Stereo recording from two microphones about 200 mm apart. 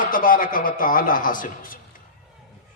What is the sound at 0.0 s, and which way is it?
A man's voice, 45° left (ahead or behind).